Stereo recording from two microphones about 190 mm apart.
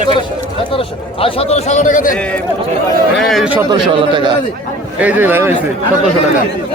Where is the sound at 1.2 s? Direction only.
30° left (ahead or behind).